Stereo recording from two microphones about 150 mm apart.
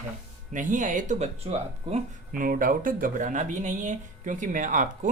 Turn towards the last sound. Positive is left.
turn(degrees=-60)  # may be behind; listen again after turning